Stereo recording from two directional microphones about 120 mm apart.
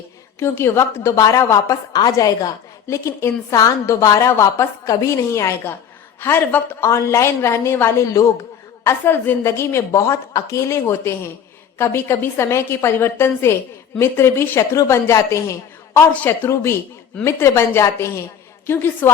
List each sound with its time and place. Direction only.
0.3 s a woman's voice: 20° left (ahead or behind)